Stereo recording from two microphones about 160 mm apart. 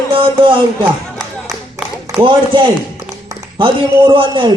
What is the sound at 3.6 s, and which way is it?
Speech, 30° right (ahead or behind).